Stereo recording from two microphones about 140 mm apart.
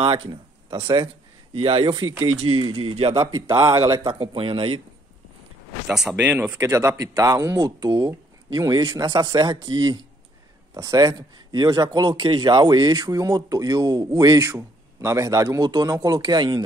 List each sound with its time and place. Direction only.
0.0 s speech: 40° right (ahead or behind)
3.4 s speech: 20° right (ahead or behind)
4.0 s speech: 35° right (ahead or behind)
5.9 s speech: 5° right (ahead or behind)
6.6 s speech: 20° right (ahead or behind)